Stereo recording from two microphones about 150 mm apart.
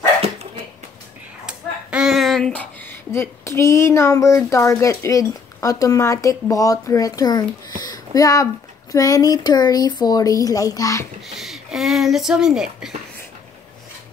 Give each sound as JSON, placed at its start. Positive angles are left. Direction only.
{"t": 1.4, "sound": "speech", "side_deg": -5}
{"t": 7.8, "sound": "a sound", "side_deg": 25}
{"t": 8.9, "sound": "speech", "side_deg": 25}
{"t": 11.3, "sound": "speech", "side_deg": 0}